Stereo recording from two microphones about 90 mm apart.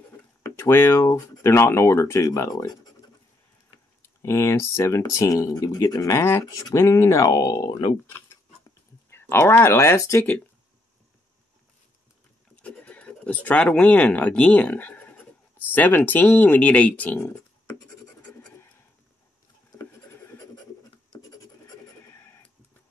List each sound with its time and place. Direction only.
0.4 s speech: 30° left (ahead or behind); by 2.9 s 45° left (ahead or behind)
4.2 s speech: 30° left (ahead or behind); by 6.1 s 50° left (ahead or behind)
6.1 s speech: 30° left (ahead or behind)
7.2 s speech: 45° left (ahead or behind)
9.1 s speech: 25° left (ahead or behind)
12.6 s speech: 15° left (ahead or behind)
21.1 s filing: 45° left (ahead or behind)